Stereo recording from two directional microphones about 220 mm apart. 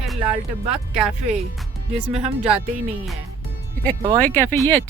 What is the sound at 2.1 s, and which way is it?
Speech, 30° right (ahead or behind).